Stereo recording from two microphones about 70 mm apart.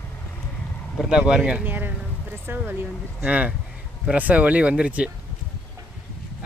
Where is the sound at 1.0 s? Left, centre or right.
Centre; by 2.8 s right.